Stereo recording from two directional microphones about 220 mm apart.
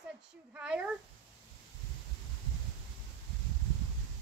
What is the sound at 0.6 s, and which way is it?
Speech, 5° right (ahead or behind).